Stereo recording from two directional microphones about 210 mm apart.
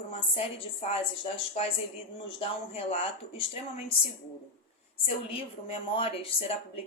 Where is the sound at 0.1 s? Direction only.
30° left (ahead or behind).